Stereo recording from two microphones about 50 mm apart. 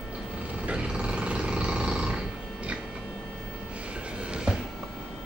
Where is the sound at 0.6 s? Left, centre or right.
Right.